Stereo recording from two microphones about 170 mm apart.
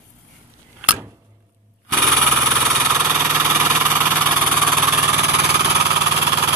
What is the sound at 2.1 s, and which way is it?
Engine, 15° right (ahead or behind).